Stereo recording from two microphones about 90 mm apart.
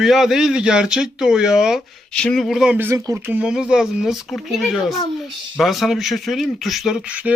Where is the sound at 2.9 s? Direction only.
35° right (ahead or behind).